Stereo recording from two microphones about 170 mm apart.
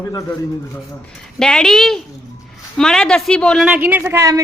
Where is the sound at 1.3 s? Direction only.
5° left (ahead or behind).